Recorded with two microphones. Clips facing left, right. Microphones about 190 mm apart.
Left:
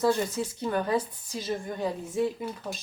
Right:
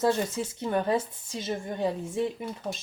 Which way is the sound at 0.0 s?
25° right (ahead or behind).